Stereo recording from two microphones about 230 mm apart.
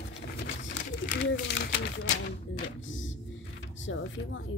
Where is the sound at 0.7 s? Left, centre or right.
Left.